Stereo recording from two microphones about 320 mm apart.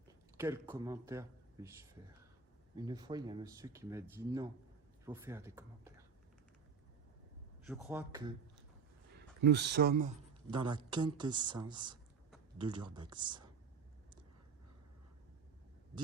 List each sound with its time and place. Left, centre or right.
0.3 s speech: centre
2.7 s speech: centre
5.0 s speech: centre
7.9 s speech: centre
9.1 s speech: right
10.5 s speech: centre